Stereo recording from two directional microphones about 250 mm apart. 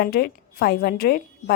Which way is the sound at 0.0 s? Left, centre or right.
Left.